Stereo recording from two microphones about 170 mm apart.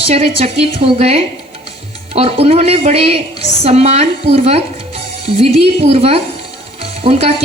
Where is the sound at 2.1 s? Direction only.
35° right (ahead or behind).